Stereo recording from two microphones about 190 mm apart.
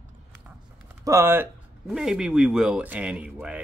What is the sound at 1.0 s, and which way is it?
Speech, 15° right (ahead or behind).